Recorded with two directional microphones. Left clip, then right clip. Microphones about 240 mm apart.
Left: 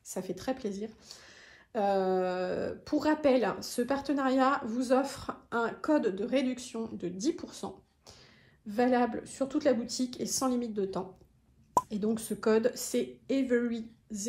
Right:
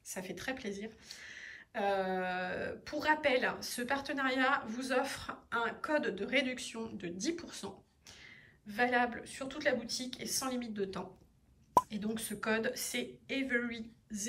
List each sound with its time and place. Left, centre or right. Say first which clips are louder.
0.0 s speech: left 5 dB; centre